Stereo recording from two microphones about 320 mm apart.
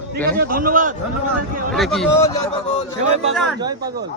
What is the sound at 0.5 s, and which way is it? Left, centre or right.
Speech, right.